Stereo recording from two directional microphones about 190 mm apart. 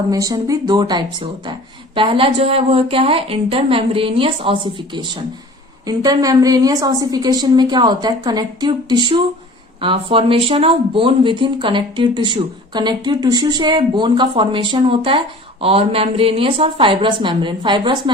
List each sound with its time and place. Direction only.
0.1 s speech: 20° right (ahead or behind)